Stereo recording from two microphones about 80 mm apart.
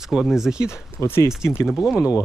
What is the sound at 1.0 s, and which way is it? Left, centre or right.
Speech, left.